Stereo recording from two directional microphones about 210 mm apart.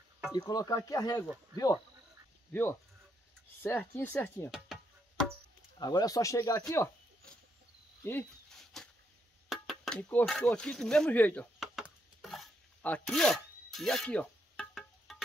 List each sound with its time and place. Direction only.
0.3 s speech: 20° left (ahead or behind)
2.5 s speech: 10° left (ahead or behind)
4.7 s music: centre (ahead or behind)
5.8 s speech: 20° left (ahead or behind)
6.7 s a sound: 15° left (ahead or behind)